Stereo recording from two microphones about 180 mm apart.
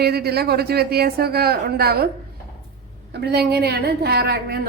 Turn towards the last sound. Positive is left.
turn(degrees=-60)  # may be behind; listen again after turning